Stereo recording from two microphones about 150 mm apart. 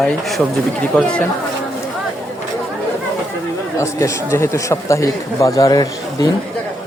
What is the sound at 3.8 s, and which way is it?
Speech, 20° left (ahead or behind).